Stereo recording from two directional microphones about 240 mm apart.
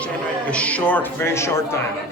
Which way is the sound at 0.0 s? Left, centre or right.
Centre.